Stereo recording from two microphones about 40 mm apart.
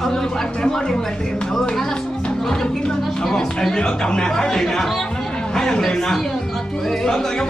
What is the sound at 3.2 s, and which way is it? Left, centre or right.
Speech, centre.